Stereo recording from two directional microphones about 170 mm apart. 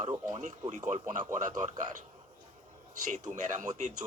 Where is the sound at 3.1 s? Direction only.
45° right (ahead or behind).